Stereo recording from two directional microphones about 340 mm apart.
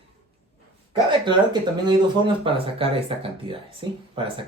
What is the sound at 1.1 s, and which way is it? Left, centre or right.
Speech, centre.